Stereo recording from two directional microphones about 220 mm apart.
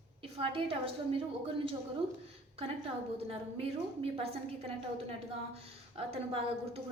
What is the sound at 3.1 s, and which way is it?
A woman's voice, 25° right (ahead or behind).